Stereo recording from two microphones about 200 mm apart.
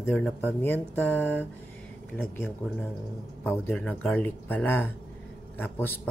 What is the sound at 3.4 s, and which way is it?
Speech, 10° left (ahead or behind).